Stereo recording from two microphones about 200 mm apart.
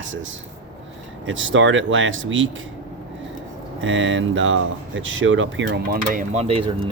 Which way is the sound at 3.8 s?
70° right (ahead or behind).